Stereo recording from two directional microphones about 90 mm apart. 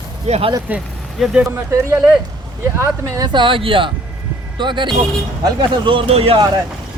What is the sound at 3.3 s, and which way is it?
Speech, 65° right (ahead or behind).